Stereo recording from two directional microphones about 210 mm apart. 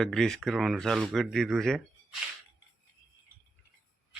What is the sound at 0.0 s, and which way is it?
Speech, centre (ahead or behind).